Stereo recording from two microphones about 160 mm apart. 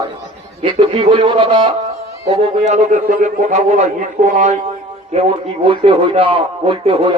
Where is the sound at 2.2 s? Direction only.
45° right (ahead or behind).